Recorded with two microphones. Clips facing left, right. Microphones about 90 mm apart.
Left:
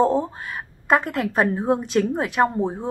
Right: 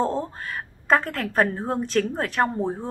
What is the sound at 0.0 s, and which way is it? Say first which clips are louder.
A woman's voice: left 5 dB; 15° left (ahead or behind).